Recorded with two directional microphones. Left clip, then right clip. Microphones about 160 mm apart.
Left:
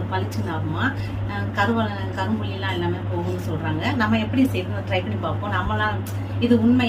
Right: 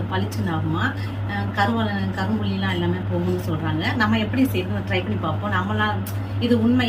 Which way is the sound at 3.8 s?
5° left (ahead or behind).